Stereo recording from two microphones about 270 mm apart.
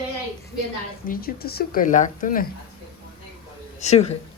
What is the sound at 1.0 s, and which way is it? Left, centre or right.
Speech, left.